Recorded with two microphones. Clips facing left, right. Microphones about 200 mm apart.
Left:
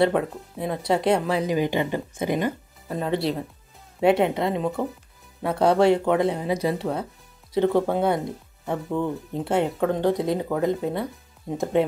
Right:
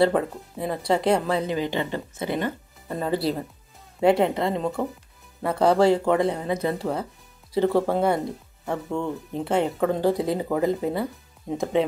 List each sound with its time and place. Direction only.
0.0 s speech: centre (ahead or behind)
1.4 s speech: 15° left (ahead or behind)
2.9 s speech: centre (ahead or behind)